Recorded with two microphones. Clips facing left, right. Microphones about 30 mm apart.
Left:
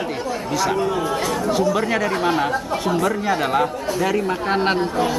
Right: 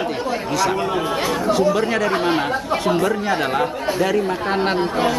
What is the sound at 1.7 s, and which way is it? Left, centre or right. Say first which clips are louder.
Speech: right 2 dB; centre.